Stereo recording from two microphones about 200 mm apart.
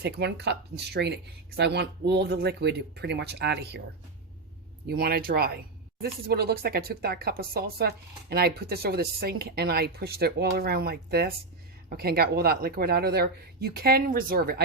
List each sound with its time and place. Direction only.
0.0 s speech: 55° right (ahead or behind)
4.9 s speech: 50° right (ahead or behind)